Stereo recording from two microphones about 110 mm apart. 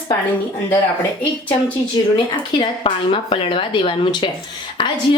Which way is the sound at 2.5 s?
50° left (ahead or behind).